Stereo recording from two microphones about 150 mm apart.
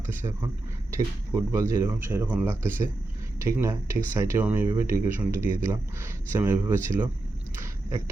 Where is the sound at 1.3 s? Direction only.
20° right (ahead or behind).